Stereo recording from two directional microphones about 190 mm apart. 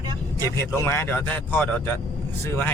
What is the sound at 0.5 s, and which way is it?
Speech, 15° left (ahead or behind).